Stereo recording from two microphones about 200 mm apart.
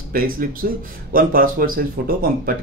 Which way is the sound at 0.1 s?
45° right (ahead or behind).